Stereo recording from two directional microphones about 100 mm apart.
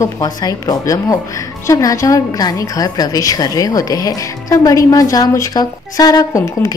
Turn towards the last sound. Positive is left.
turn(degrees=40)  # may be behind; listen again after turning